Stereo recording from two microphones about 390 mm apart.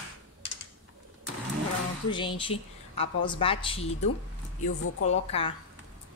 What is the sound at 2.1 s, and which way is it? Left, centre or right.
A woman's voice, centre.